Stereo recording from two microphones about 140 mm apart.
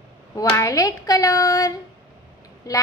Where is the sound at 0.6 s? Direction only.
25° left (ahead or behind).